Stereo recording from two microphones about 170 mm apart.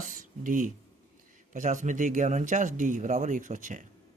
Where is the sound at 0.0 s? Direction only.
50° right (ahead or behind).